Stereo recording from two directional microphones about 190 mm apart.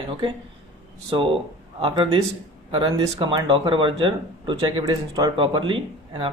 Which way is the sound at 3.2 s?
25° right (ahead or behind).